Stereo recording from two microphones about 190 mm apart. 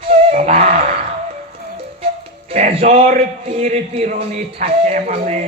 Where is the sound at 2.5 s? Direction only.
35° right (ahead or behind).